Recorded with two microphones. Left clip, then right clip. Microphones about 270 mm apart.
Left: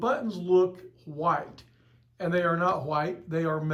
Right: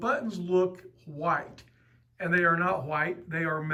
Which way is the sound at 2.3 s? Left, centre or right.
Right.